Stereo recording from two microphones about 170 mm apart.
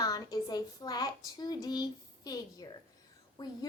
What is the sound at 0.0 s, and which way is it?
A child's voice, 20° left (ahead or behind).